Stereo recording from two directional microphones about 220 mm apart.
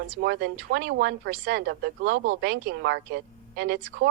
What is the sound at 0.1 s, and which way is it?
A woman's voice, 50° right (ahead or behind).